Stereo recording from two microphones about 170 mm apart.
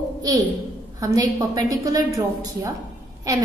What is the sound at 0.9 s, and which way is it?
A woman's voice, 20° right (ahead or behind).